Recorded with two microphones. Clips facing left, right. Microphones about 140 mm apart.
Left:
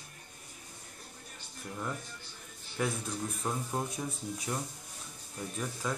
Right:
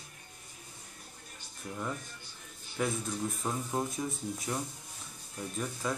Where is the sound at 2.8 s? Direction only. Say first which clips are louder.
Right 1 dB; centre (ahead or behind).